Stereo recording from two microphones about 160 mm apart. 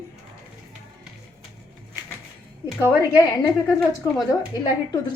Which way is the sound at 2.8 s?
20° left (ahead or behind).